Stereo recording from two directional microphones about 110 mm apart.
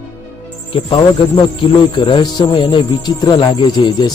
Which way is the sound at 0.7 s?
50° left (ahead or behind).